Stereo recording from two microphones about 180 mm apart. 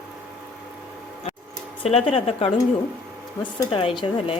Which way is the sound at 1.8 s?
30° left (ahead or behind).